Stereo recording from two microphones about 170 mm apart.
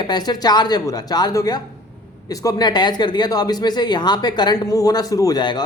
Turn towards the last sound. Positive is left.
turn(degrees=25)  # may be behind; listen again after turning